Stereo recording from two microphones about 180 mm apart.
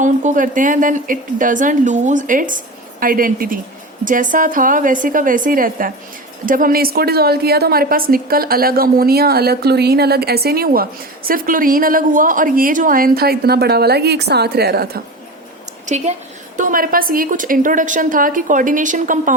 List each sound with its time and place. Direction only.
0.0 s a woman's voice: 45° right (ahead or behind); by 15.0 s 60° right (ahead or behind)
16.6 s a woman's voice: 50° right (ahead or behind)